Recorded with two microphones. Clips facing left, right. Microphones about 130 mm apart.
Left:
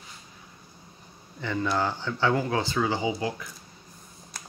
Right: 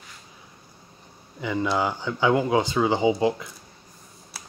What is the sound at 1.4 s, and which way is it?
Speech, 10° right (ahead or behind).